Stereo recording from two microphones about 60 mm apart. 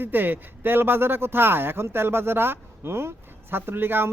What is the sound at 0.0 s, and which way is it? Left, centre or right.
A man's voice, right.